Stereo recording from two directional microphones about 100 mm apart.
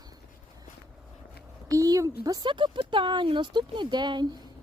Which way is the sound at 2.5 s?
55° right (ahead or behind).